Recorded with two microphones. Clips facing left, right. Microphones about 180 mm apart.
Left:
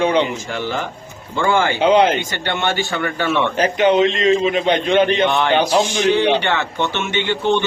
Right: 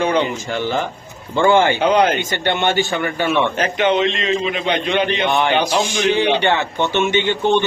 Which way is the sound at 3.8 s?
35° left (ahead or behind).